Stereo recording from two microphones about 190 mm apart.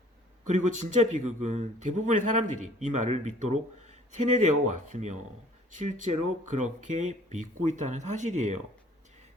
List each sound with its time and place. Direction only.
0.4 s a man's voice: 40° right (ahead or behind)